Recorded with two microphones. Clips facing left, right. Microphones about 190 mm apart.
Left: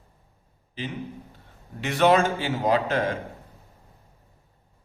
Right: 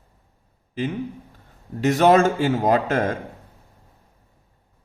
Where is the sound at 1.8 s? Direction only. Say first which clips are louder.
Right 4 dB; 40° right (ahead or behind).